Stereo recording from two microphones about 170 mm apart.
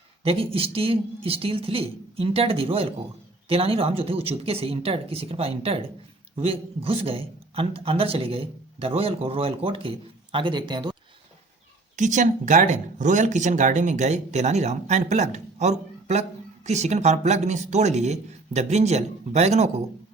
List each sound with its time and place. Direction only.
0.3 s a man's voice: 35° right (ahead or behind)
11.9 s a man's voice: 45° right (ahead or behind)